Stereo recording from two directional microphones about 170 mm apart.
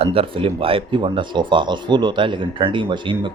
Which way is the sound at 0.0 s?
35° right (ahead or behind).